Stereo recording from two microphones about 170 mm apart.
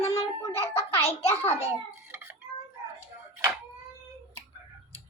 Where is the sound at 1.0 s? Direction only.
35° left (ahead or behind).